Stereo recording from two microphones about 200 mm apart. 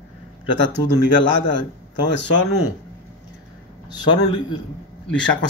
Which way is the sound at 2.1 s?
65° left (ahead or behind).